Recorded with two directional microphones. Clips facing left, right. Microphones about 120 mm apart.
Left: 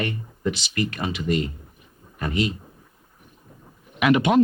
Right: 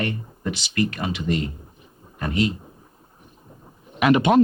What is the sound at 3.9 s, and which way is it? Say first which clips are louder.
Speech: right 2 dB; 35° right (ahead or behind).